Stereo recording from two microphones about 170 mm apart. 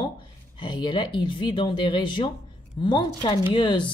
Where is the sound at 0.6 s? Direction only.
30° left (ahead or behind).